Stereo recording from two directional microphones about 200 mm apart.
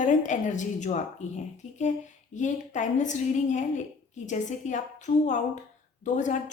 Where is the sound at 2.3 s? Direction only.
40° left (ahead or behind).